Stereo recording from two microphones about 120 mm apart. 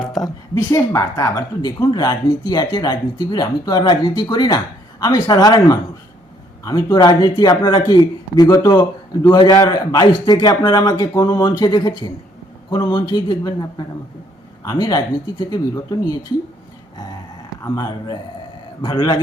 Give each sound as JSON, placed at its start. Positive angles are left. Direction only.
{"t": 0.5, "sound": "speech", "side_deg": 30}
{"t": 8.8, "sound": "speech", "side_deg": 40}
{"t": 17.6, "sound": "speech", "side_deg": 30}